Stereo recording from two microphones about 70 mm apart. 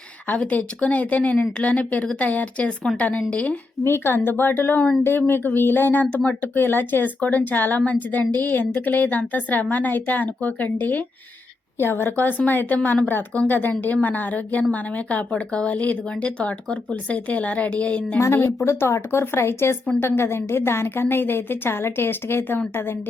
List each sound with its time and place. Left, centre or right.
0.3 s a woman's voice: centre
3.8 s a woman's voice: left; by 18.2 s centre
18.2 s a woman's voice: left